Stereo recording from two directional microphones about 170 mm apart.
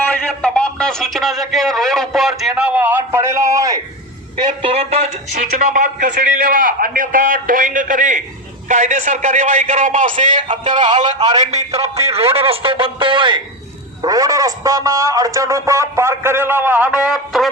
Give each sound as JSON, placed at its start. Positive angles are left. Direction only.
{"t": 0.0, "sound": "a man's voice", "side_deg": 10}
{"t": 4.4, "sound": "a man's voice", "side_deg": -30}